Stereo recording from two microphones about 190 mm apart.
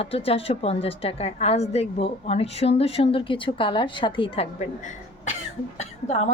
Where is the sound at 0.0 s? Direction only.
30° left (ahead or behind).